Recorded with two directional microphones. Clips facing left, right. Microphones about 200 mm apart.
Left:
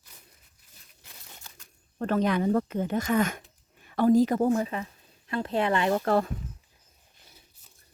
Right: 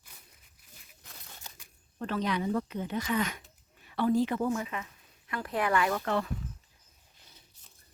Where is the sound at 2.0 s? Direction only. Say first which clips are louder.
Left 6 dB; 50° left (ahead or behind); by 6.0 s 25° left (ahead or behind).